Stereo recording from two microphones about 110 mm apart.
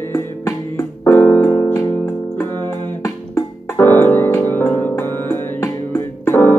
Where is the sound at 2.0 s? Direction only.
20° left (ahead or behind).